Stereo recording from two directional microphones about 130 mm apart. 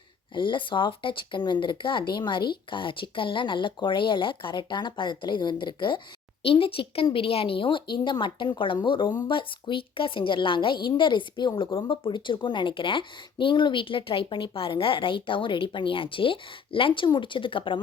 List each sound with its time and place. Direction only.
0.3 s a woman's voice: 40° left (ahead or behind)